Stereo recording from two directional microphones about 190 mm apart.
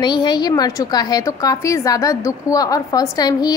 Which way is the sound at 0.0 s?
25° left (ahead or behind).